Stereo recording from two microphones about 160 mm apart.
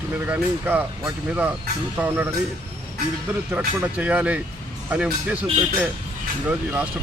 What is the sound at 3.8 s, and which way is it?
Speech, 10° right (ahead or behind).